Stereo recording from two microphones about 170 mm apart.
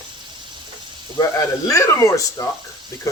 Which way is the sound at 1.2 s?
20° left (ahead or behind).